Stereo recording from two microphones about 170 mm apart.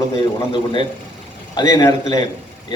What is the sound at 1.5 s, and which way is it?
Speech, 25° left (ahead or behind).